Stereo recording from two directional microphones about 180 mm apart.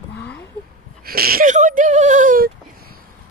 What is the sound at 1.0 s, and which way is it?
Whimper, 55° right (ahead or behind).